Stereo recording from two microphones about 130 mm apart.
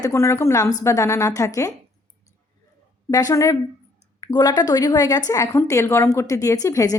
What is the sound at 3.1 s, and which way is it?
A woman's voice, 25° left (ahead or behind).